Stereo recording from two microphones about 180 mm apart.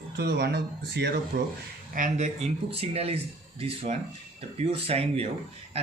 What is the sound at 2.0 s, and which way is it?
Speech, 45° right (ahead or behind).